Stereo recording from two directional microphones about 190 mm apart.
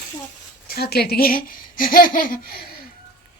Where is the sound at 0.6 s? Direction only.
55° left (ahead or behind).